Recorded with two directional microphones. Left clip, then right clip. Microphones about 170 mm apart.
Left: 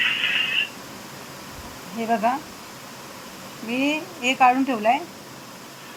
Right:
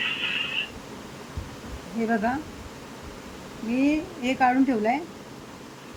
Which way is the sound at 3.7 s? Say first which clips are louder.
Left 1 dB; 10° left (ahead or behind).